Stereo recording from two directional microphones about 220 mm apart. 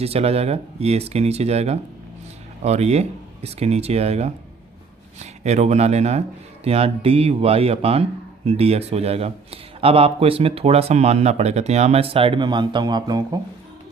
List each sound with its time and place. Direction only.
0.0 s speech: 25° right (ahead or behind)